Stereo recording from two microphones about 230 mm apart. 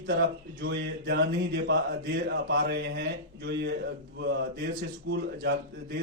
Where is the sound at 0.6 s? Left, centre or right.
Right.